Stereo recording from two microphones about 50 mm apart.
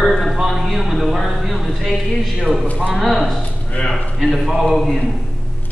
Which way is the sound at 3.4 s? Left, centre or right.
Left.